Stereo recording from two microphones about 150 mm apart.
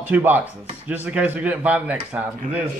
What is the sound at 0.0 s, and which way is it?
Chopping, 10° right (ahead or behind).